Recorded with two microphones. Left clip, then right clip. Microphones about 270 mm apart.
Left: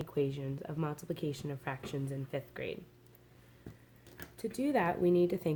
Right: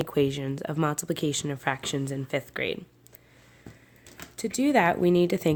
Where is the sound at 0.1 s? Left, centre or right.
Right.